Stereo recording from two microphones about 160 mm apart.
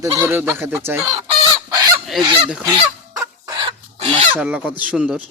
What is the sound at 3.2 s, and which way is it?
Chicken, 20° right (ahead or behind).